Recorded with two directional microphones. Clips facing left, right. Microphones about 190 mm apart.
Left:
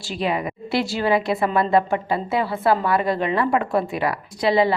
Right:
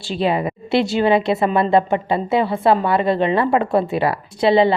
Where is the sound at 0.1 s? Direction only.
30° right (ahead or behind).